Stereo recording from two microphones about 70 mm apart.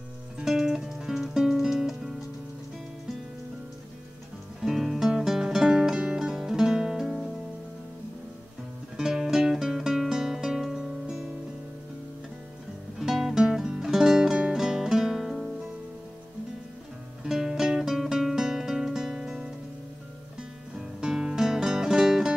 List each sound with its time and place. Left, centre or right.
0.4 s music: centre
4.6 s music: centre
8.9 s music: centre
13.0 s music: centre
17.2 s music: centre
20.7 s music: centre